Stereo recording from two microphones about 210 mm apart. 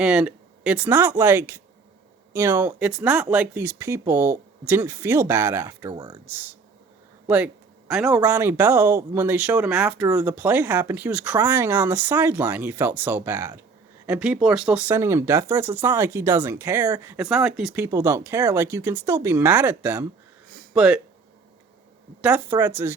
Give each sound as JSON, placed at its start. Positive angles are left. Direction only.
{"t": 0.0, "sound": "speech", "side_deg": -5}
{"t": 6.2, "sound": "speech", "side_deg": -10}
{"t": 22.2, "sound": "speech", "side_deg": -10}